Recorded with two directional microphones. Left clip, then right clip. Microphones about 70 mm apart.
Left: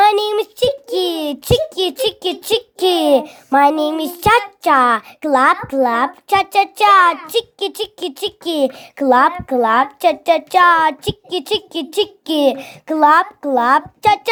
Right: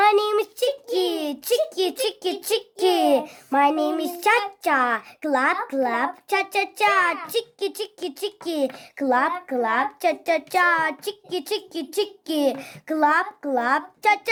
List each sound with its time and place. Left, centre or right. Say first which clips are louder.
0.0 s a sound: left 5 dB; left
5.6 s a child's voice: left 8 dB; left
13.1 s a child's voice: left 10 dB; left